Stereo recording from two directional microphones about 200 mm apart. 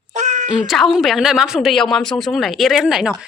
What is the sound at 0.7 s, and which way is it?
A woman's voice, centre (ahead or behind).